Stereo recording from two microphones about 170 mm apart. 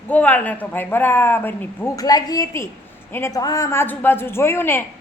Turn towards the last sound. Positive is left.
turn(degrees=15)  # may be behind; listen again after turning